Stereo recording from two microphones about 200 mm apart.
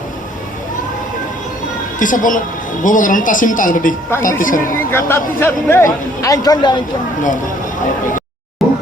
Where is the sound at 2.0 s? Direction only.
40° left (ahead or behind).